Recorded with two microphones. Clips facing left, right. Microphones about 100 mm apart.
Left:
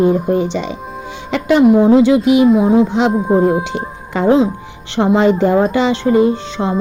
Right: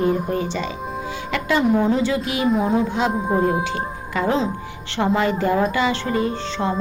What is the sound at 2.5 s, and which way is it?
Speech, 5° left (ahead or behind).